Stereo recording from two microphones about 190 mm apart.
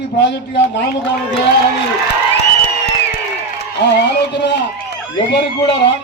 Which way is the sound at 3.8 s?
65° left (ahead or behind).